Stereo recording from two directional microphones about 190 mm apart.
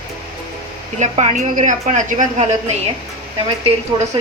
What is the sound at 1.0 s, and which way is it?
A woman's voice, 40° right (ahead or behind).